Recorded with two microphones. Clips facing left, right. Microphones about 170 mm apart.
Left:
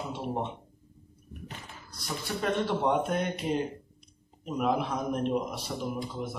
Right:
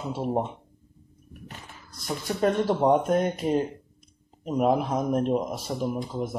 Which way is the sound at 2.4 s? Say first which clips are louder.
Right 6 dB; 40° right (ahead or behind).